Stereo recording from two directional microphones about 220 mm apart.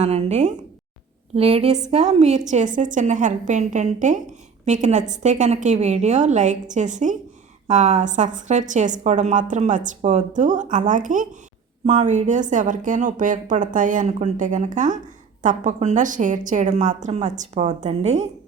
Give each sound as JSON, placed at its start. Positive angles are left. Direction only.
{"t": 0.0, "sound": "a woman's voice", "side_deg": -30}